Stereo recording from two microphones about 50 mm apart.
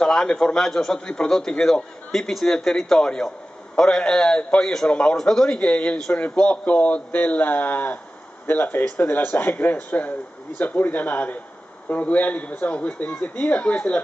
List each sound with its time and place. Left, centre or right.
0.0 s a man's voice: centre
5.6 s a man's voice: left